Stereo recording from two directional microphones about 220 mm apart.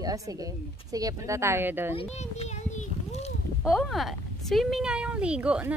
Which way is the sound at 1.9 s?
25° left (ahead or behind).